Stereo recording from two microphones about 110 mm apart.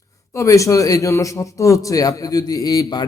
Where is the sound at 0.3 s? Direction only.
30° left (ahead or behind).